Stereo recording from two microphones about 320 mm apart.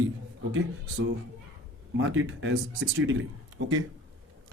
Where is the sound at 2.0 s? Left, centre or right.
Right.